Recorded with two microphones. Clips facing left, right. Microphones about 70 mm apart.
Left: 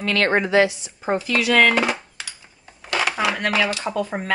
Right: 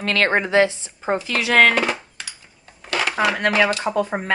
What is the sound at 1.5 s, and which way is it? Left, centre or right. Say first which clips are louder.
Speech: right 2 dB; right.